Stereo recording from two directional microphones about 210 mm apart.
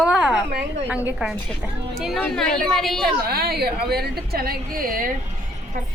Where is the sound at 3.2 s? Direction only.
45° right (ahead or behind).